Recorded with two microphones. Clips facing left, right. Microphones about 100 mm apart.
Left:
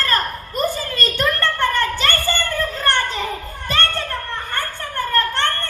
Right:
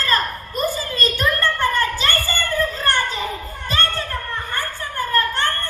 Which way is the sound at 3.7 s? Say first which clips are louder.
Left 1 dB; 60° left (ahead or behind).